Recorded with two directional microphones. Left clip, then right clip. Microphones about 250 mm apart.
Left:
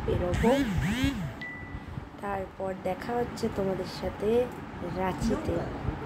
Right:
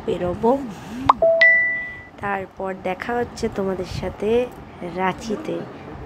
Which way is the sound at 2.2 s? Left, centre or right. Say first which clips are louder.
Right 8 dB; centre.